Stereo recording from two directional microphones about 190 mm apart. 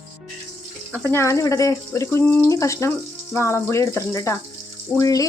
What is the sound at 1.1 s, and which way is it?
Speech, 15° left (ahead or behind).